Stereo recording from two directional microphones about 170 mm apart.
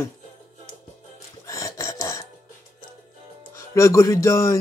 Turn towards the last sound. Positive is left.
turn(degrees=15)  # may be behind; listen again after turning